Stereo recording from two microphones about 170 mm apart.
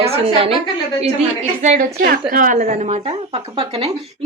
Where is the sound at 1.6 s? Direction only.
45° right (ahead or behind).